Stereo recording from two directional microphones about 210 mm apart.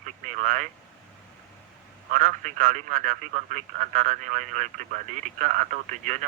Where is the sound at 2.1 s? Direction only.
35° right (ahead or behind).